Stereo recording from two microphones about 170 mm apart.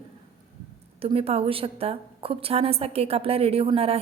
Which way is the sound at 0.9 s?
35° right (ahead or behind).